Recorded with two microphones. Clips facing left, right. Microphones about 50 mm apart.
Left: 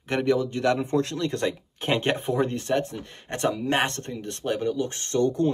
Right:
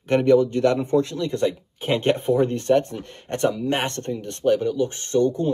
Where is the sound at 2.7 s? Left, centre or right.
Centre.